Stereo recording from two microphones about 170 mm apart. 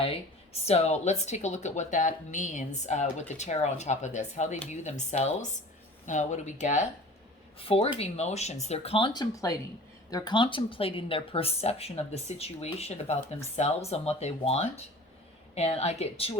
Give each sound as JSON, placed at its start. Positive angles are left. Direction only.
{"t": 0.0, "sound": "speech", "side_deg": 35}
{"t": 7.6, "sound": "a woman's voice", "side_deg": 35}